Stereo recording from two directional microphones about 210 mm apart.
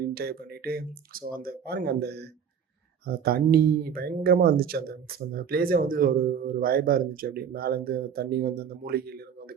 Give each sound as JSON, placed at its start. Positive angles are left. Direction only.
{"t": 0.1, "sound": "speech", "side_deg": -45}